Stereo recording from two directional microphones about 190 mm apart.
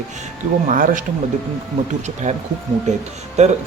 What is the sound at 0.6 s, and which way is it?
Speech, 45° right (ahead or behind).